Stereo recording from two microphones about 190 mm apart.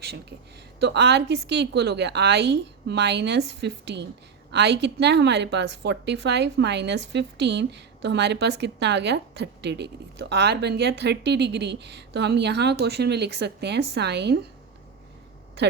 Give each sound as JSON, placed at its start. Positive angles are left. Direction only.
{"t": 0.0, "sound": "a woman's voice", "side_deg": -55}